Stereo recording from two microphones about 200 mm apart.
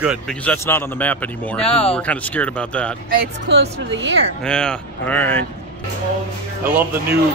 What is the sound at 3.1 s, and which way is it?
A woman's voice, 55° right (ahead or behind).